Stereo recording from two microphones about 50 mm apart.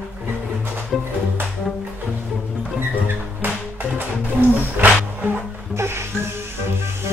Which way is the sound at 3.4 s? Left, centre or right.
Right.